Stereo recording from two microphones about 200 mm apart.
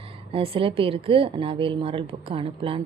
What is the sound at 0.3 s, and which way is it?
Speech, 25° right (ahead or behind).